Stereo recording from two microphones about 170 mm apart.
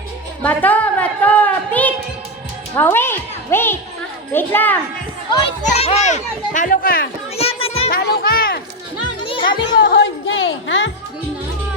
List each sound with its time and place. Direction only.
0.4 s a woman's voice: 10° left (ahead or behind)
5.6 s a child's voice: 40° left (ahead or behind); by 7.1 s 60° left (ahead or behind)
7.3 s children playing: 35° left (ahead or behind)
7.9 s music: 65° left (ahead or behind)
9.2 s music: 30° left (ahead or behind)
9.8 s music: 90° left